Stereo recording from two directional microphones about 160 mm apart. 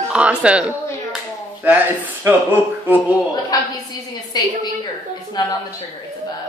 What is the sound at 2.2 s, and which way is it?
Speech, 20° right (ahead or behind).